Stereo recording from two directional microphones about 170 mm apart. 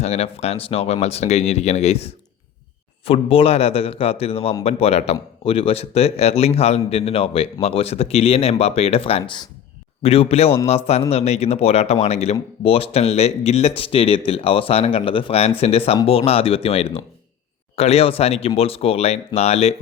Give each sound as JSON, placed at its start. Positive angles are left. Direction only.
{"t": 0.0, "sound": "a man's voice", "side_deg": 40}